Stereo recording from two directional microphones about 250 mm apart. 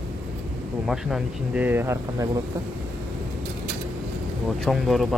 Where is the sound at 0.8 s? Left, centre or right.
Centre.